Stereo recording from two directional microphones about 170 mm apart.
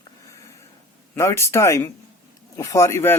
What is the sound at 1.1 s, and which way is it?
Speech, 15° left (ahead or behind).